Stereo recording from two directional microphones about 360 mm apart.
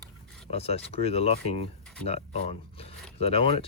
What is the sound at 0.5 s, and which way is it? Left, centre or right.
Speech, centre.